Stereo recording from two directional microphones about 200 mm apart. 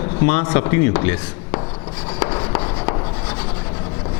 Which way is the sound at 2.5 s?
20° left (ahead or behind).